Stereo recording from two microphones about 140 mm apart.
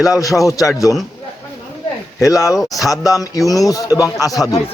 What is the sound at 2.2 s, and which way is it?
A man's voice, 25° left (ahead or behind).